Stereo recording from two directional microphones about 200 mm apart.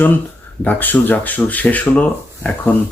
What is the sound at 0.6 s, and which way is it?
Speech, 10° left (ahead or behind).